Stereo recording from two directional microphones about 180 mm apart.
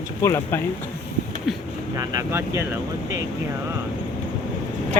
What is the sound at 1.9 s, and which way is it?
Speech, 15° right (ahead or behind).